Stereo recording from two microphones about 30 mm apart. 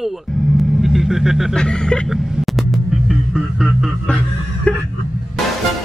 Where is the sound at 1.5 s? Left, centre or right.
Left.